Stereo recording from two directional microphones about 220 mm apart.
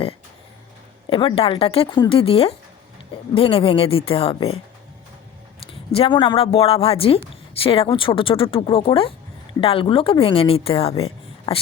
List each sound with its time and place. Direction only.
1.1 s a woman's voice: 25° left (ahead or behind)
5.9 s a woman's voice: 25° left (ahead or behind)